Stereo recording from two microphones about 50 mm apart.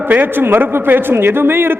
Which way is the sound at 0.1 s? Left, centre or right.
Right.